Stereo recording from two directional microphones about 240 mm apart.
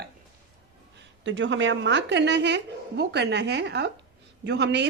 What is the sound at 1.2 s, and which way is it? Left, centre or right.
Speech, right.